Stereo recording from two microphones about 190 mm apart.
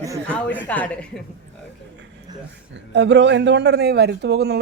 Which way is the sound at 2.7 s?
70° right (ahead or behind).